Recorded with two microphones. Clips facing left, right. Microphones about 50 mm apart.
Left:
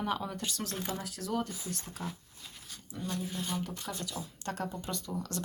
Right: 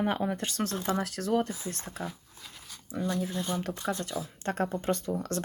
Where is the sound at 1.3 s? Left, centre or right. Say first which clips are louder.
Right 6 dB; right.